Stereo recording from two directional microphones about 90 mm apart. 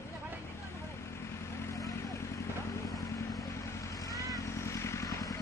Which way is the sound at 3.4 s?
35° left (ahead or behind).